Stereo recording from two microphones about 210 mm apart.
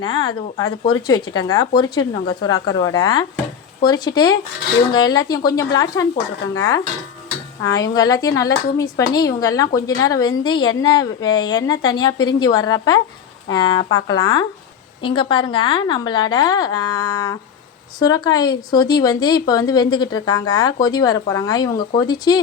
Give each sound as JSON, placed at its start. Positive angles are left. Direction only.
{"t": 0.0, "sound": "speech", "side_deg": 20}